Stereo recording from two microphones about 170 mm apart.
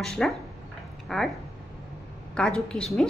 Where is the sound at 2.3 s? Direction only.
5° left (ahead or behind).